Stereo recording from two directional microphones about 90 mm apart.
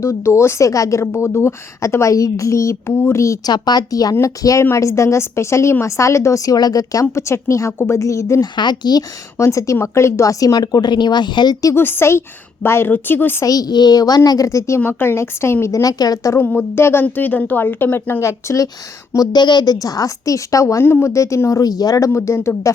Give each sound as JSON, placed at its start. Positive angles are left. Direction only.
{"t": 0.0, "sound": "a woman's voice", "side_deg": 30}
{"t": 3.4, "sound": "speech", "side_deg": 50}
{"t": 4.1, "sound": "a woman's voice", "side_deg": 35}
{"t": 8.5, "sound": "speech", "side_deg": 55}
{"t": 9.4, "sound": "a woman's voice", "side_deg": 35}
{"t": 11.7, "sound": "a woman's voice", "side_deg": 25}
{"t": 13.4, "sound": "a woman's voice", "side_deg": 40}
{"t": 14.8, "sound": "a woman's voice", "side_deg": 25}
{"t": 15.8, "sound": "speech", "side_deg": 45}
{"t": 16.3, "sound": "a woman's voice", "side_deg": 20}
{"t": 18.2, "sound": "a woman's voice", "side_deg": 35}
{"t": 19.1, "sound": "a woman's voice", "side_deg": 50}